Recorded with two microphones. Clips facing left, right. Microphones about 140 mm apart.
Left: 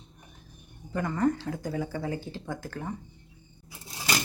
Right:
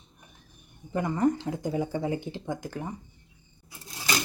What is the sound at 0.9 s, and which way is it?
Speech, 20° right (ahead or behind).